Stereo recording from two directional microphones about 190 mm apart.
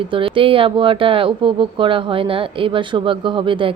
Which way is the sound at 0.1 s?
25° right (ahead or behind).